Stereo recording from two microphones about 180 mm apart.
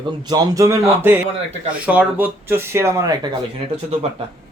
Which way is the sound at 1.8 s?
10° right (ahead or behind).